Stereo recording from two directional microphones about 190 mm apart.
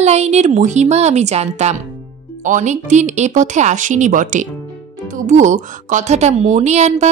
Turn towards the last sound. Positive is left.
turn(degrees=-35)  # may be behind; listen again after turning